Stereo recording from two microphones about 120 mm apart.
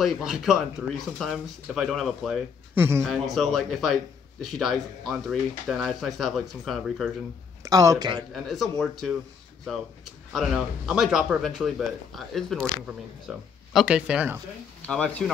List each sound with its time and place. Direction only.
0.0 s speech: centre (ahead or behind)
2.7 s speech: 20° right (ahead or behind)
3.0 s speech: centre (ahead or behind)
7.6 s speech: 30° right (ahead or behind)
8.3 s speech: centre (ahead or behind)
10.3 s speech: centre (ahead or behind)
12.8 s speech: 10° right (ahead or behind)
14.9 s speech: 5° left (ahead or behind)